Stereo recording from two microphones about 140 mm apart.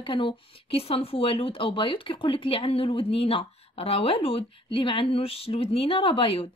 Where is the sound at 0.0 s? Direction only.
35° left (ahead or behind).